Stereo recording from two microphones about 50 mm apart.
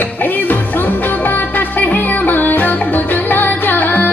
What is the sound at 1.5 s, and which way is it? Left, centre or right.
Music, left.